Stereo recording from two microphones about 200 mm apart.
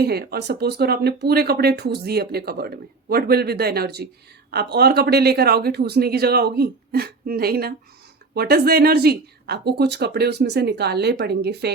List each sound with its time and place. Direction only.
0.0 s speech: 50° right (ahead or behind)